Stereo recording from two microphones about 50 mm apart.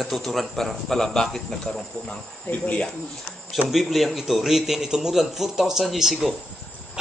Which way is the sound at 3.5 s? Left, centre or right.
Centre.